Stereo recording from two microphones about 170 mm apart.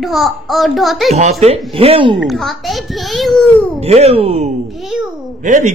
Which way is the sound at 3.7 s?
35° right (ahead or behind).